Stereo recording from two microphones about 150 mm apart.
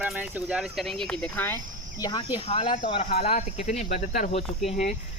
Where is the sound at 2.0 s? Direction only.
30° left (ahead or behind); by 4.3 s 55° left (ahead or behind).